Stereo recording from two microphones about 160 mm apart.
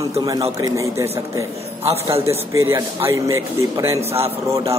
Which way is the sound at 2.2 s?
15° right (ahead or behind).